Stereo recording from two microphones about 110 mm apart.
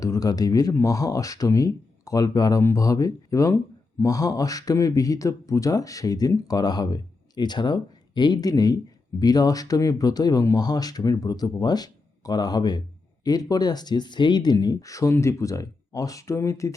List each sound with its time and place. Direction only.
0.0 s speech: 35° left (ahead or behind)